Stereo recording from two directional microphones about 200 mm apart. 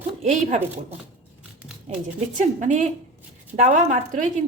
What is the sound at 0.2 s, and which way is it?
Speech, 35° right (ahead or behind).